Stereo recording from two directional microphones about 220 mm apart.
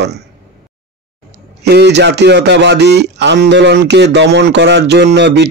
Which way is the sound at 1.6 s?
50° right (ahead or behind).